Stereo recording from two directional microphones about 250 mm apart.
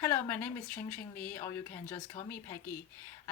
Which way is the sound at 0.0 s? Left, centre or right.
Centre.